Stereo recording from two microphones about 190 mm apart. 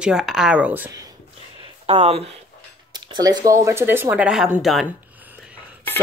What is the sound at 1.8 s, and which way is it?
Speech, 30° right (ahead or behind).